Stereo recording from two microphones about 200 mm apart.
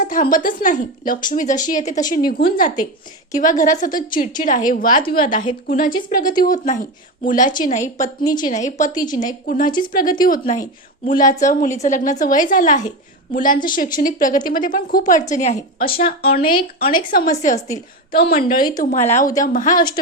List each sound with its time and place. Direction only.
0.1 s a woman's voice: 45° left (ahead or behind)
9.0 s speech: 20° left (ahead or behind)
9.2 s a woman's voice: 45° left (ahead or behind)
10.4 s a woman's voice: 35° left (ahead or behind)
18.2 s a woman's voice: 45° left (ahead or behind)